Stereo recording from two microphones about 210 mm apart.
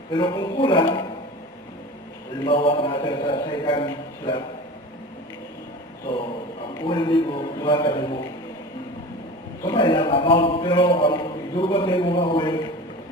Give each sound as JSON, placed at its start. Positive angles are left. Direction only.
{"t": 0.1, "sound": "a man's voice", "side_deg": 20}
{"t": 2.4, "sound": "a man's voice", "side_deg": 25}
{"t": 6.8, "sound": "a man's voice", "side_deg": 20}
{"t": 9.6, "sound": "a man's voice", "side_deg": 20}